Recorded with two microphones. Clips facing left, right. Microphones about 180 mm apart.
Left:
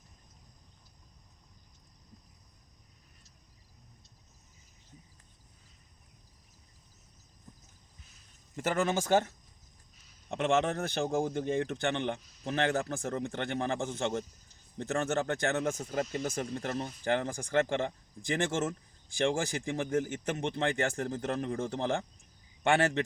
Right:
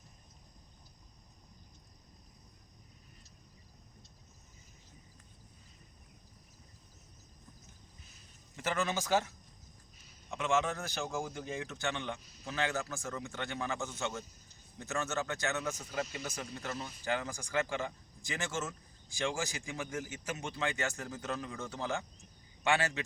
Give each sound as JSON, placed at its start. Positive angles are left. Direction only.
{"t": 8.5, "sound": "speech", "side_deg": 45}
{"t": 10.3, "sound": "a man's voice", "side_deg": 60}